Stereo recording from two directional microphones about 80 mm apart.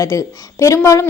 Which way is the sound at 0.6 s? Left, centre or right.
Left.